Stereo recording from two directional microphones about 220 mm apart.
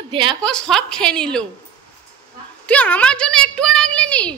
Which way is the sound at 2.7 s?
5° left (ahead or behind).